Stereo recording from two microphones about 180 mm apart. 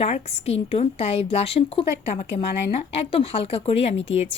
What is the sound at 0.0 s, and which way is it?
Speech, 35° left (ahead or behind).